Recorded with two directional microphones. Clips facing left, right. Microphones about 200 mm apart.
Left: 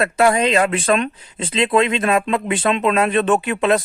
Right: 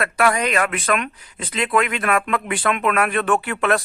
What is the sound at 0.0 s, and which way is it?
Speech, 25° left (ahead or behind).